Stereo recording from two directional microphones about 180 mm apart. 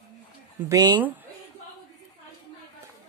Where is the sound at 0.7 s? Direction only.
20° right (ahead or behind).